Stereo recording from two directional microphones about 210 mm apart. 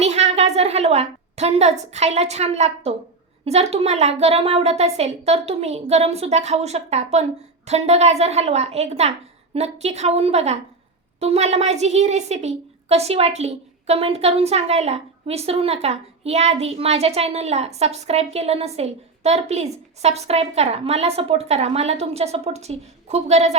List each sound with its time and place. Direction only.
0.0 s a woman's voice: 30° right (ahead or behind)